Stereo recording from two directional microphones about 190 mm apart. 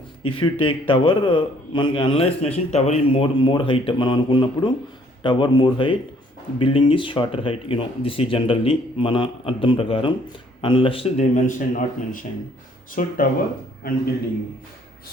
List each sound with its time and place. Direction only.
0.2 s a man's voice: 30° left (ahead or behind); by 13.2 s 45° left (ahead or behind)